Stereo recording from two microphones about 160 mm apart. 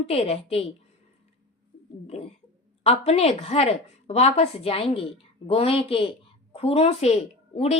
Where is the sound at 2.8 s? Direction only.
40° left (ahead or behind).